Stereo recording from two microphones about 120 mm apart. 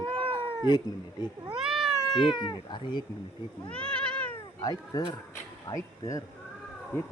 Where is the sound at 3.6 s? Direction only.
10° left (ahead or behind).